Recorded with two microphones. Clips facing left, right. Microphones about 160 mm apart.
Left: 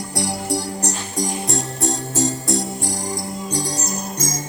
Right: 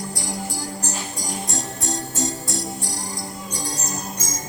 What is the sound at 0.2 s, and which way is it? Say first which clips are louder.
Music: left 11 dB; 70° left (ahead or behind).